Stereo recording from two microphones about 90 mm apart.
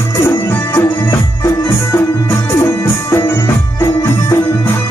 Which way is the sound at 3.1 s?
30° left (ahead or behind).